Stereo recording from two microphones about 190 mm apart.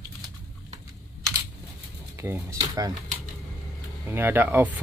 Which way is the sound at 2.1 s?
15° right (ahead or behind).